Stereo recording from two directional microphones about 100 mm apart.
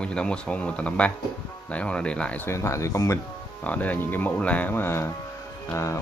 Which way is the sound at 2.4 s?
30° left (ahead or behind).